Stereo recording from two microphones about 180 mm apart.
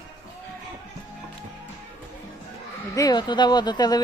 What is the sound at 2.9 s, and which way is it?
Speech, 20° left (ahead or behind).